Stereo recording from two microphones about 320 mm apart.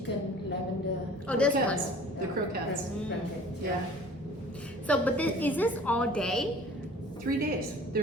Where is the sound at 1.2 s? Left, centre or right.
Centre.